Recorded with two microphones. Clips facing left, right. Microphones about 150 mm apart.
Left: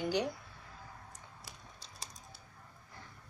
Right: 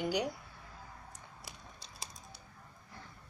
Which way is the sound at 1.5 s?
15° right (ahead or behind).